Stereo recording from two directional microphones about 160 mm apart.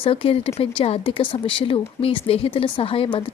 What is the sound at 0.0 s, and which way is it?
Speech, 35° left (ahead or behind).